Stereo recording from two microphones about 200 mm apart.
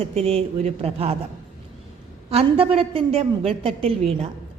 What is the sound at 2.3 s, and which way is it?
A woman's voice, 30° right (ahead or behind).